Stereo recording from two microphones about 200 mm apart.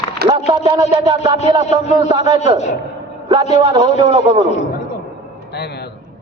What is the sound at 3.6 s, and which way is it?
Music, 20° right (ahead or behind).